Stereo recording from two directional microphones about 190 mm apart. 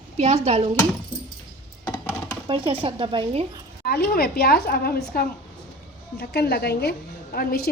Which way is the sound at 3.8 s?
55° left (ahead or behind).